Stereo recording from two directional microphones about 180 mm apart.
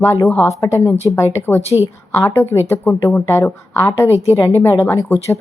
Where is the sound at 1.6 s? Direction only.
35° left (ahead or behind).